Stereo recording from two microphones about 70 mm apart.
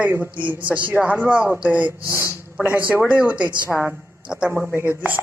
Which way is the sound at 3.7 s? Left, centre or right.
Centre.